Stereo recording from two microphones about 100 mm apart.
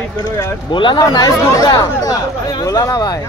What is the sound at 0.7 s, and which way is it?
Speech, 50° left (ahead or behind).